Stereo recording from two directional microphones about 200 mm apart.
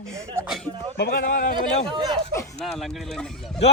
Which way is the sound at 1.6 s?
25° right (ahead or behind).